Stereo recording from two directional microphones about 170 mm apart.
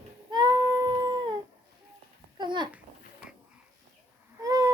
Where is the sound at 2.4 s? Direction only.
25° right (ahead or behind).